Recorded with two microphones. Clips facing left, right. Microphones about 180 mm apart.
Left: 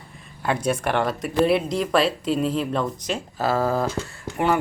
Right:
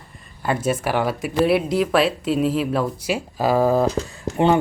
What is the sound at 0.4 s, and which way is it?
Speech, 5° right (ahead or behind).